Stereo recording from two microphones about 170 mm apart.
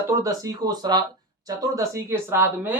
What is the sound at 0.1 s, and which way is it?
Speech, 20° right (ahead or behind).